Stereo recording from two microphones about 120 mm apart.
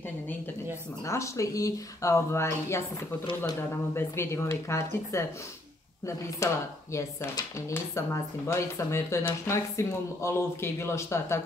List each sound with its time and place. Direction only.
1.0 s speech: 25° left (ahead or behind)